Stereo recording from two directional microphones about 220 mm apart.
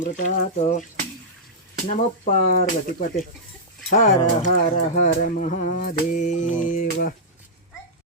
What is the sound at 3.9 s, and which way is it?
Mantra, 35° left (ahead or behind).